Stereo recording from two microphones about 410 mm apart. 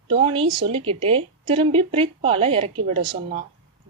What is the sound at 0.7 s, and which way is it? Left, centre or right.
A woman's voice, centre.